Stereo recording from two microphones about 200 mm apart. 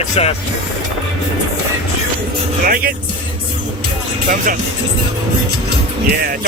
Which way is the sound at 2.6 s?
45° right (ahead or behind).